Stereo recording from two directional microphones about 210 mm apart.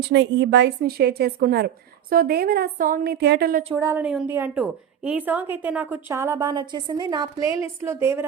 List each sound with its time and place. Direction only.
0.1 s a woman's voice: 55° right (ahead or behind)
3.8 s a woman's voice: 15° right (ahead or behind)